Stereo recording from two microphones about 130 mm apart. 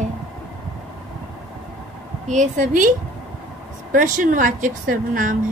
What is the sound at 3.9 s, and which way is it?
A woman's voice, 90° right.